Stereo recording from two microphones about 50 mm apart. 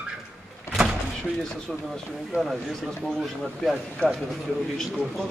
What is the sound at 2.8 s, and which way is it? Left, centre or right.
Speech, centre.